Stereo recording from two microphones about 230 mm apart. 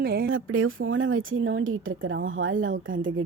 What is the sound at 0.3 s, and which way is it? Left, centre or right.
Speech, right.